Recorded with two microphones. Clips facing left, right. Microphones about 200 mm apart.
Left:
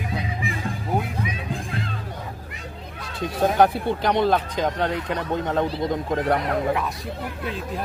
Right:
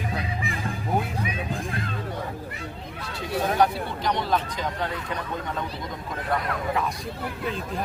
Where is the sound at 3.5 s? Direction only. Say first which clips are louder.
Left 5 dB; 60° left (ahead or behind).